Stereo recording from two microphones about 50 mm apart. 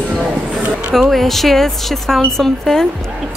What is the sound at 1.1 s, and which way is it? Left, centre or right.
Speech, centre.